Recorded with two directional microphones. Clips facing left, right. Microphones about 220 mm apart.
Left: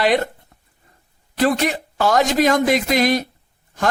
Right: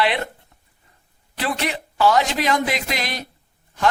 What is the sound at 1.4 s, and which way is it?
Speech, 45° left (ahead or behind).